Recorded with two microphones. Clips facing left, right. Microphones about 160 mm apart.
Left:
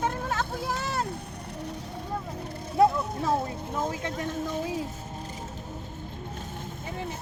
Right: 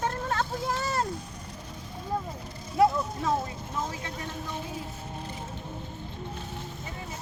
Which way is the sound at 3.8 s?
50° left (ahead or behind).